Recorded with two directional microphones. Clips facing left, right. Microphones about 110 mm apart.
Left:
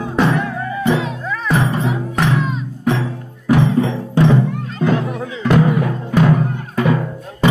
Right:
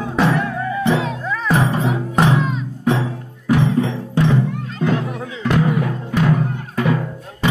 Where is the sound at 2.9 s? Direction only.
10° right (ahead or behind).